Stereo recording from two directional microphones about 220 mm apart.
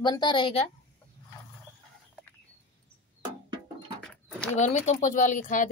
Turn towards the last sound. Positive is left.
turn(degrees=35)  # may be behind; listen again after turning